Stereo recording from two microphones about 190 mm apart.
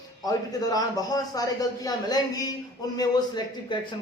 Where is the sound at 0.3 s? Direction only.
20° left (ahead or behind).